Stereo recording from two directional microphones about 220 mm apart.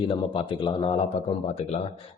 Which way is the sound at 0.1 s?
25° left (ahead or behind).